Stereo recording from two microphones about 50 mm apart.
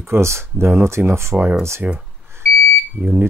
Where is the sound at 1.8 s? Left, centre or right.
Right.